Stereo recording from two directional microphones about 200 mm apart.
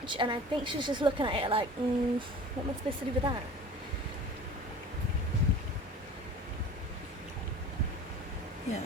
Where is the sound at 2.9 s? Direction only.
30° right (ahead or behind).